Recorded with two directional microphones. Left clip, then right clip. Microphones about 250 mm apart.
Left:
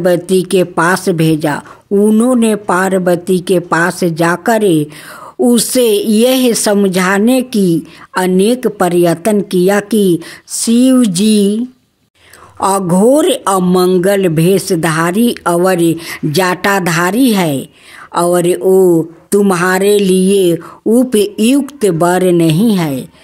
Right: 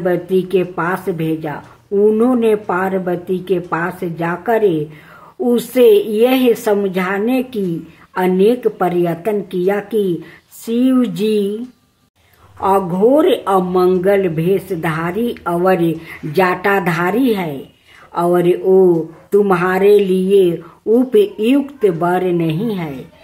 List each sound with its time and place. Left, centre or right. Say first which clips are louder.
0.0 s a woman's voice: left 5 dB; left
12.5 s a woman's voice: left 3 dB; left